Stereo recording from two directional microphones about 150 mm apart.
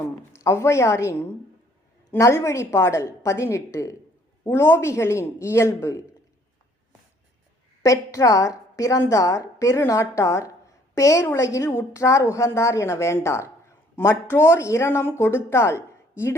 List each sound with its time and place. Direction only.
0.3 s a woman's voice: 20° left (ahead or behind)
2.1 s a woman's voice: 20° left (ahead or behind)
7.8 s a woman's voice: 20° left (ahead or behind)